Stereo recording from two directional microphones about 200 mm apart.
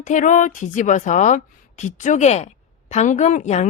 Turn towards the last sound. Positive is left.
turn(degrees=35)  # may be behind; listen again after turning